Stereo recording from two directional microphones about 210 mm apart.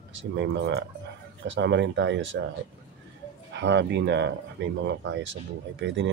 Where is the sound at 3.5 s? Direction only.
55° right (ahead or behind).